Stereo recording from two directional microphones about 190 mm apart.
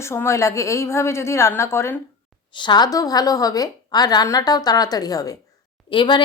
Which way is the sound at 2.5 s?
25° left (ahead or behind).